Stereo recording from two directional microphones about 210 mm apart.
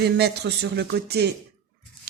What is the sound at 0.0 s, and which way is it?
Speech, 50° right (ahead or behind).